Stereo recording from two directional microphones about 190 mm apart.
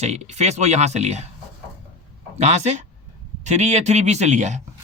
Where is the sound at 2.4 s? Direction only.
35° right (ahead or behind).